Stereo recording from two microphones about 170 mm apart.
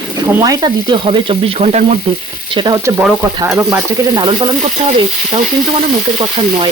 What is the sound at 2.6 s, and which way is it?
Frying, 25° right (ahead or behind).